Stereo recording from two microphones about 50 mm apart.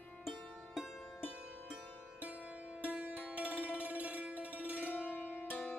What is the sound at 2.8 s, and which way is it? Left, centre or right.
Music, right.